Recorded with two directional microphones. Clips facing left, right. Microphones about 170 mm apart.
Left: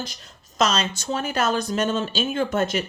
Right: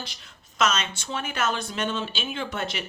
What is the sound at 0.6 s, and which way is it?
Speech, 35° left (ahead or behind).